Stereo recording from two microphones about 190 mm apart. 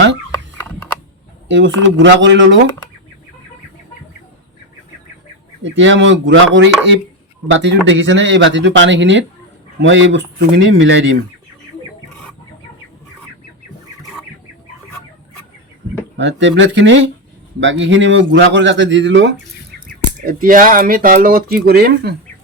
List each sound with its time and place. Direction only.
1.5 s speech: 75° right (ahead or behind)
5.6 s speech: 75° right (ahead or behind)
16.1 s speech: 70° right (ahead or behind)
19.9 s speech: 45° right (ahead or behind)